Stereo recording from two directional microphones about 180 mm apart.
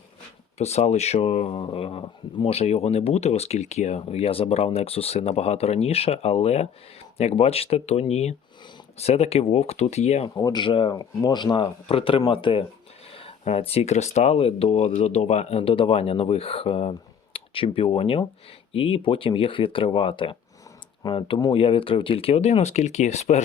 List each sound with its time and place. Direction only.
0.6 s speech: 35° left (ahead or behind)
10.2 s speech: 20° left (ahead or behind); by 23.4 s 40° left (ahead or behind)